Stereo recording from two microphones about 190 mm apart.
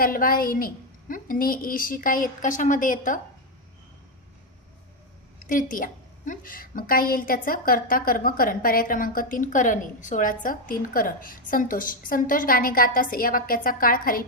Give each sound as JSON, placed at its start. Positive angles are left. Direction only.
{"t": 0.0, "sound": "a woman's voice", "side_deg": 50}
{"t": 5.5, "sound": "a woman's voice", "side_deg": 45}